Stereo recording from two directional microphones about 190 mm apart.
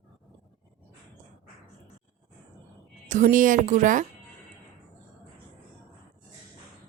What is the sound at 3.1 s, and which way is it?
Speech, 40° right (ahead or behind).